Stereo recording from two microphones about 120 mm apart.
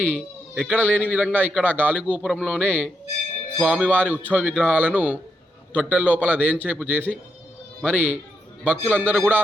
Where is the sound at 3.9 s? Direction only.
15° right (ahead or behind).